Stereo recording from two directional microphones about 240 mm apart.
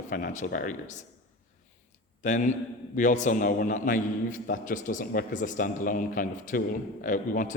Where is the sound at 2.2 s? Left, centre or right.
Left.